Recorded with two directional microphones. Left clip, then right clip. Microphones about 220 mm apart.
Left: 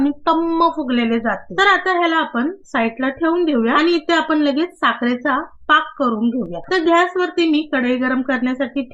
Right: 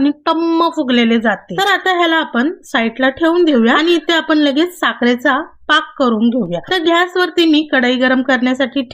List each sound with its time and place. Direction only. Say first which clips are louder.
0.0 s a woman's voice: right 2 dB; 30° right (ahead or behind)